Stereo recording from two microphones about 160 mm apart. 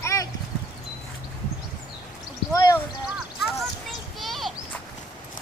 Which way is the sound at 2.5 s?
20° left (ahead or behind).